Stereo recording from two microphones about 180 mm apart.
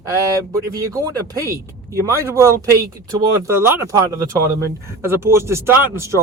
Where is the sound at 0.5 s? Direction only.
20° right (ahead or behind).